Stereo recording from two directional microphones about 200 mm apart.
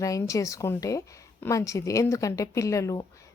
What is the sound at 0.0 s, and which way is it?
A woman's voice, 15° left (ahead or behind).